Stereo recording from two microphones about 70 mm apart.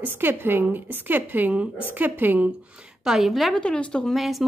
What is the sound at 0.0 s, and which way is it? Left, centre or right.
A woman's voice, right.